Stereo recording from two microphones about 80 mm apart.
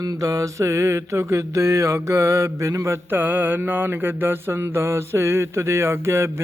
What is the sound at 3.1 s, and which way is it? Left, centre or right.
Mantra, right.